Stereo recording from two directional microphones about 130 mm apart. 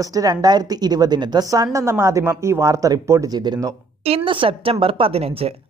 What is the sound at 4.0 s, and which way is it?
A woman's voice, 45° right (ahead or behind).